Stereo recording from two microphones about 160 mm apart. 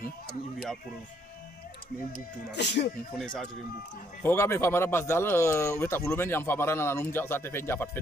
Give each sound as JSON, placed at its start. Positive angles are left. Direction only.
{"t": 2.5, "sound": "speech", "side_deg": 90}
{"t": 3.2, "sound": "speech", "side_deg": 5}
{"t": 4.2, "sound": "speech", "side_deg": 15}